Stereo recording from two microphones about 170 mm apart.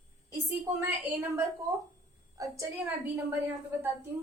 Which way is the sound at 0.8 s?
10° right (ahead or behind).